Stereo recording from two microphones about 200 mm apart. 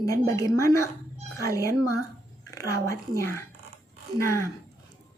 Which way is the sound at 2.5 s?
15° left (ahead or behind).